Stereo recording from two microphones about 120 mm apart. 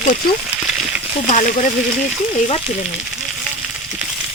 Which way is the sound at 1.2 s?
90° left.